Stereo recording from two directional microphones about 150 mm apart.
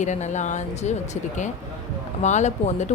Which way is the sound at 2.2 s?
50° left (ahead or behind).